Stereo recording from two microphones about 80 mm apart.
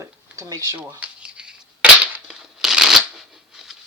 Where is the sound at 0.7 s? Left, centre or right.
Right.